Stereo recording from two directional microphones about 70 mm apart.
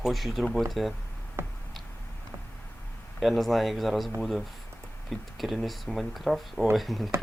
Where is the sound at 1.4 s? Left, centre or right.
Right.